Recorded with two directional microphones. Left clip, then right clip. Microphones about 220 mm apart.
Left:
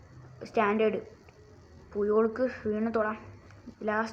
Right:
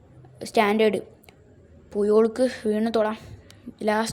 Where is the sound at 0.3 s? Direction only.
35° right (ahead or behind).